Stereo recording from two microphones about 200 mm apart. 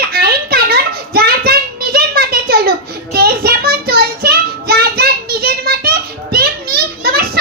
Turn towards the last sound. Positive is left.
turn(degrees=-50)  # may be behind; listen again after turning